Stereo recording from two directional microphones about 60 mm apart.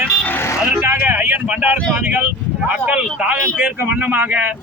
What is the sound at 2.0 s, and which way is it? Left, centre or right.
A man's voice, right.